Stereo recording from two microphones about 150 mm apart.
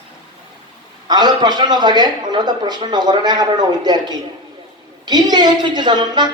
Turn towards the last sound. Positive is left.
turn(degrees=-30)  # may be behind; listen again after turning